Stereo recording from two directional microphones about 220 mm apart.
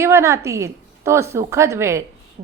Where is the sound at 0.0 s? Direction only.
10° right (ahead or behind).